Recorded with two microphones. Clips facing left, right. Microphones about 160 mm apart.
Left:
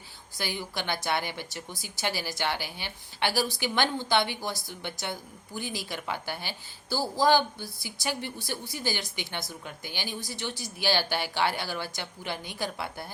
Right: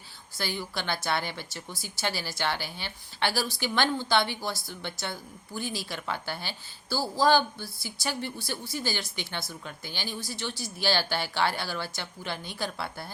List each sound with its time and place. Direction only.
0.3 s a woman's voice: 15° left (ahead or behind)